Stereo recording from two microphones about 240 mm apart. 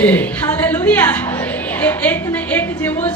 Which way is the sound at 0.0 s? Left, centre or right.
Centre.